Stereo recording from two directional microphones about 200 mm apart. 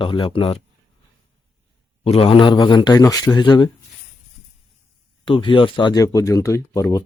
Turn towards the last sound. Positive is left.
turn(degrees=15)  # may be behind; listen again after turning